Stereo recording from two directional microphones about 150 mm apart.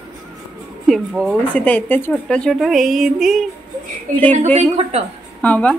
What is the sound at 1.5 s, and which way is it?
Speech, 10° left (ahead or behind).